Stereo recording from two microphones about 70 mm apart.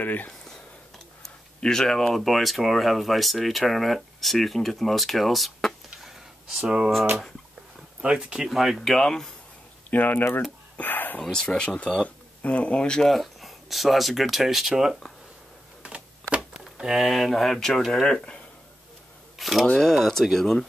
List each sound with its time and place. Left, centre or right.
0.0 s speech: left
0.5 s speech: centre
5.9 s a sound: centre
8.0 s speech: centre
8.5 s speech: centre
9.8 s speech: left
10.8 s whispering: left
11.3 s speech: centre
15.8 s a sound: centre
16.3 s speech: centre
19.3 s camera: centre
19.6 s speech: centre